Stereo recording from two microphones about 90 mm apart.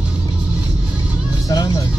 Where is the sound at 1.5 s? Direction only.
45° left (ahead or behind).